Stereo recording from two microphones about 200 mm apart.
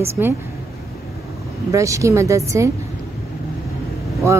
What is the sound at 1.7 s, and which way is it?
Speech, 15° right (ahead or behind).